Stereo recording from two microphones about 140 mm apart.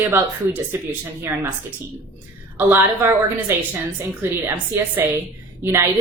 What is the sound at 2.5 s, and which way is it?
A woman's voice, 15° right (ahead or behind).